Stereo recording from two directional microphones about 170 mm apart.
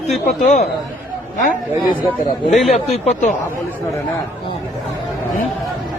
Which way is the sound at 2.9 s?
45° left (ahead or behind).